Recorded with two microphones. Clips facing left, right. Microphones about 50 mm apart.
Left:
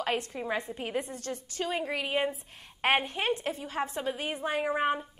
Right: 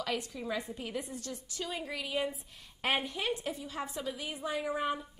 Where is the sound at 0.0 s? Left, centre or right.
Left.